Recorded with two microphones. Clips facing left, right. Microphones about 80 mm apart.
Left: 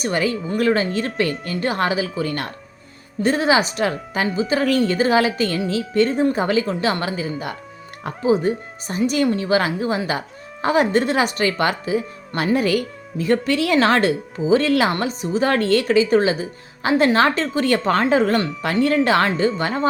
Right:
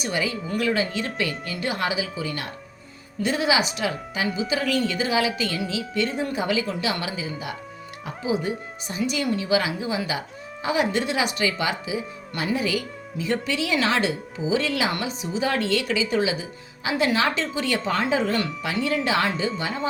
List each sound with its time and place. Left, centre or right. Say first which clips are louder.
0.0 s speech: left 5 dB; left
3.2 s speech: left 5 dB; left